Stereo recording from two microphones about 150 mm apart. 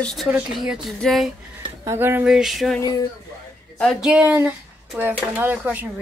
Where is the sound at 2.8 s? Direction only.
25° left (ahead or behind).